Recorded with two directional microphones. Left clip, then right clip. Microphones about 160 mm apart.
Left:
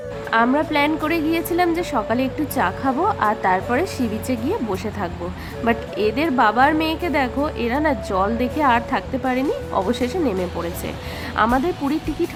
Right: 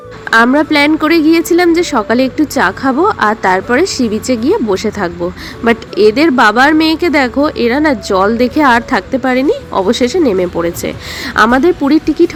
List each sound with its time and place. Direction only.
0.3 s a woman's voice: 35° right (ahead or behind)